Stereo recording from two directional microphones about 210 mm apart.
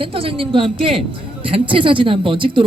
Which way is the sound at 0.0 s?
25° right (ahead or behind).